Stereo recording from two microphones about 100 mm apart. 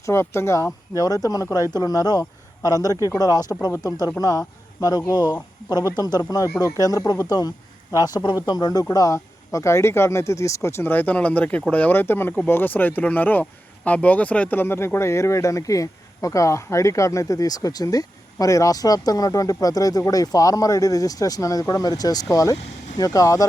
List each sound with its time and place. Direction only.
0.0 s speech: 25° left (ahead or behind)